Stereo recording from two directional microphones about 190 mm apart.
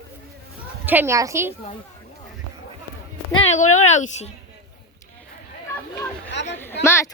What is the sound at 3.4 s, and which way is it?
Speech, 40° left (ahead or behind).